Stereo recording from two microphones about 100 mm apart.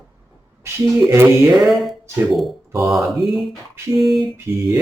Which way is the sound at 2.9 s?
Centre (ahead or behind).